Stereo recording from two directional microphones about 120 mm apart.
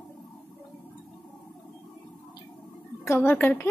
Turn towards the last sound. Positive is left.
turn(degrees=15)  # may be behind; listen again after turning